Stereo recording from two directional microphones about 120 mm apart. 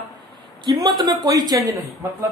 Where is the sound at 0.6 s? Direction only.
35° right (ahead or behind).